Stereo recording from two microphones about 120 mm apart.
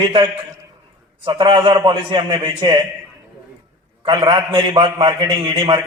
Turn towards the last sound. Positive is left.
turn(degrees=-40)  # may be behind; listen again after turning